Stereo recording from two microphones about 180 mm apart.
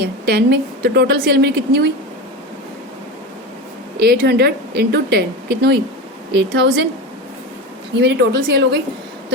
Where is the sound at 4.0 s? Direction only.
65° right (ahead or behind).